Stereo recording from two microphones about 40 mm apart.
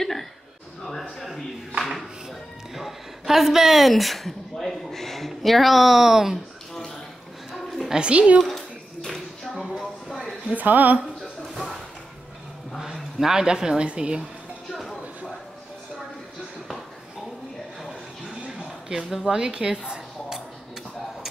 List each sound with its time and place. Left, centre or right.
0.0 s a sound: centre
1.8 s music: centre
2.7 s a woman's voice: centre
7.9 s speech: right
8.4 s a woman's voice: centre
9.0 s a sound: centre
9.8 s a sound: centre
10.5 s a woman's voice: right
12.8 s speech: centre
18.9 s speech: centre
19.3 s dishes: centre